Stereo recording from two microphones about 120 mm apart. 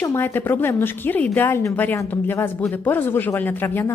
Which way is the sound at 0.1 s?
20° left (ahead or behind).